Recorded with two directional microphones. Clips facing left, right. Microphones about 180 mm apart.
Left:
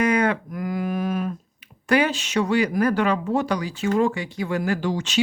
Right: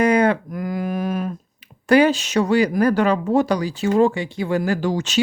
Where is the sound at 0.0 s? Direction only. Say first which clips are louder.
Right 4 dB; 30° right (ahead or behind).